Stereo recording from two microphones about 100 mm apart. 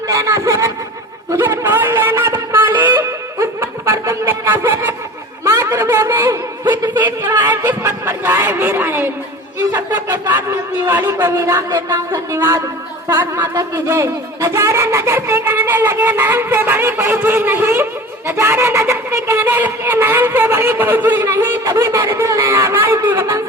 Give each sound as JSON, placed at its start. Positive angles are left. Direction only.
{"t": 0.1, "sound": "a sound", "side_deg": -30}
{"t": 3.4, "sound": "snicker", "side_deg": -25}
{"t": 5.5, "sound": "a sound", "side_deg": -30}
{"t": 6.9, "sound": "speech", "side_deg": -20}
{"t": 10.9, "sound": "speech", "side_deg": -25}
{"t": 13.5, "sound": "speech", "side_deg": -35}